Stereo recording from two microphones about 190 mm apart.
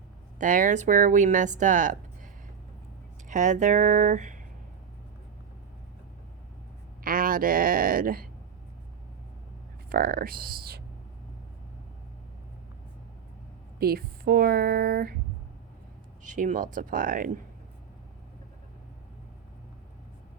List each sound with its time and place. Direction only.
0.3 s speech: 45° right (ahead or behind)
3.2 s speech: 40° right (ahead or behind)
7.0 s speech: 50° right (ahead or behind)
9.9 s speech: 50° right (ahead or behind)
13.7 s speech: 55° right (ahead or behind)
16.2 s speech: 40° right (ahead or behind)